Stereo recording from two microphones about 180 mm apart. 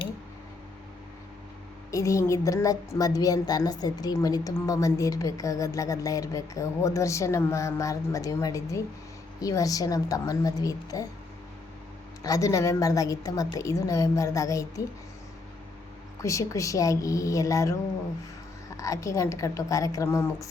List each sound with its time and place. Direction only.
1.9 s a woman's voice: 15° left (ahead or behind)
12.2 s a woman's voice: 20° left (ahead or behind)
16.2 s a woman's voice: 15° left (ahead or behind)
18.8 s a woman's voice: 20° left (ahead or behind)